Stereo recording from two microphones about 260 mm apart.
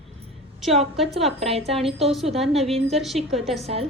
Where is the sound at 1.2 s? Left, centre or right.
Centre.